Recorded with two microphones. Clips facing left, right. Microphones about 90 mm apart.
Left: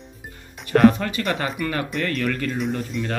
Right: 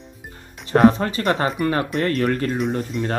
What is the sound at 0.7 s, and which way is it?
Speech, 30° right (ahead or behind).